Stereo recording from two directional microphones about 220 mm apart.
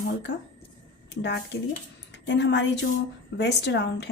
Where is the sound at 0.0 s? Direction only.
50° left (ahead or behind).